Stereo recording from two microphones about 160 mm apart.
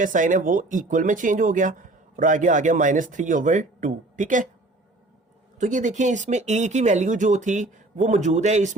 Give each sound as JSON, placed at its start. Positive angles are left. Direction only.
{"t": 0.0, "sound": "speech", "side_deg": -55}
{"t": 5.5, "sound": "speech", "side_deg": -50}